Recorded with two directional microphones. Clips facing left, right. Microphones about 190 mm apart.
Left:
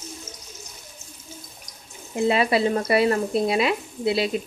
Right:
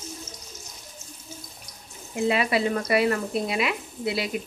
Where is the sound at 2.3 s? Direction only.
30° left (ahead or behind).